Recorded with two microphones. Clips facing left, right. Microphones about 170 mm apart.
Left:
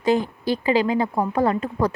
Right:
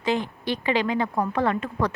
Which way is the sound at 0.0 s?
40° left (ahead or behind).